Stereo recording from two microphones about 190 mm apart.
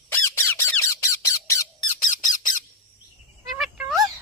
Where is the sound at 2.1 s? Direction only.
45° left (ahead or behind).